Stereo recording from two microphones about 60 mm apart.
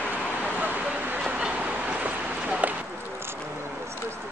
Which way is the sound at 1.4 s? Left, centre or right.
Right.